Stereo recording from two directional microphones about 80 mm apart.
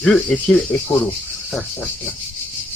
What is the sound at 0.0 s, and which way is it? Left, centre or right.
Speech, centre.